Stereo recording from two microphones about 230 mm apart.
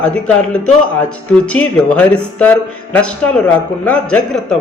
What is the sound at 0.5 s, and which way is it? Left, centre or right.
Speech, centre.